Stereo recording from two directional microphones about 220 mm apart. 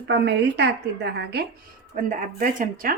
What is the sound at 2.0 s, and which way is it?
Speech, 35° right (ahead or behind).